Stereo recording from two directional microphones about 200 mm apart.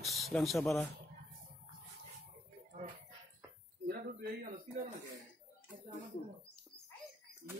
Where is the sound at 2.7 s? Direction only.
35° right (ahead or behind).